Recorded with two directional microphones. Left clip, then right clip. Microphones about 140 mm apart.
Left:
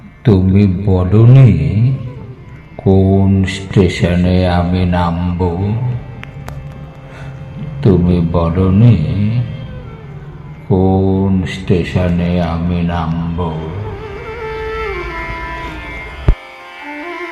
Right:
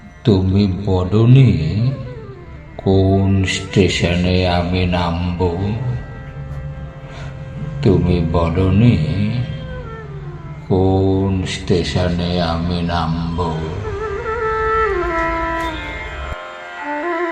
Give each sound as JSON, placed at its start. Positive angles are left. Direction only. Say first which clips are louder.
{"t": 0.3, "sound": "a man's voice", "louder": "left 3 dB", "side_deg": 20}
{"t": 2.8, "sound": "speech", "louder": "left 3 dB", "side_deg": 15}
{"t": 7.8, "sound": "speech", "louder": "left 2 dB", "side_deg": 10}
{"t": 10.7, "sound": "speech", "louder": "left 2 dB", "side_deg": 10}
{"t": 14.4, "sound": "music", "louder": "right 4 dB", "side_deg": 25}